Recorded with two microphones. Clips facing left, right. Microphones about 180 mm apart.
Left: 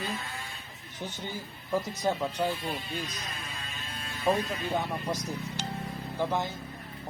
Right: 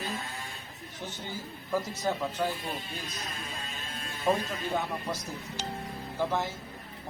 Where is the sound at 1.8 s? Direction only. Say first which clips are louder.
Left 2 dB; 20° left (ahead or behind).